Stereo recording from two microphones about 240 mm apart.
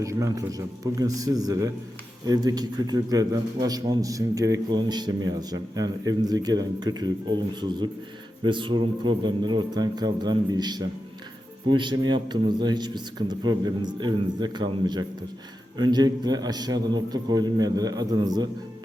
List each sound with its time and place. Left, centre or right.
0.0 s a man's voice: centre